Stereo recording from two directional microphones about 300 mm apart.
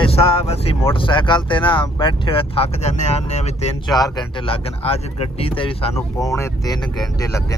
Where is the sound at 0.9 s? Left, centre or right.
Centre.